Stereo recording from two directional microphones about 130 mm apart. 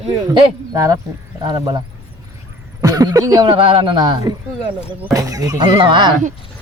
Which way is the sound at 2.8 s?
30° right (ahead or behind).